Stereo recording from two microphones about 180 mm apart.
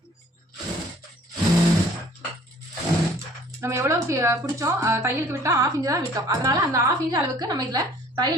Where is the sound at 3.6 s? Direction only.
15° right (ahead or behind).